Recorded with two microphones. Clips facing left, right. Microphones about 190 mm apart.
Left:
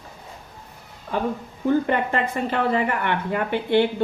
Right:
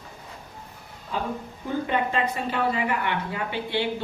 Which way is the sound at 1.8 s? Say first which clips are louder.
Left 2 dB; 55° left (ahead or behind).